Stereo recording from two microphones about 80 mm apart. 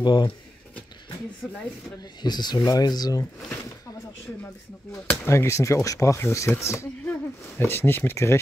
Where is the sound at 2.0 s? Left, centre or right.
Left.